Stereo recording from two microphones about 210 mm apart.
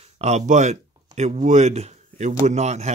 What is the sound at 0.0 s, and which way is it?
Speech, 35° right (ahead or behind).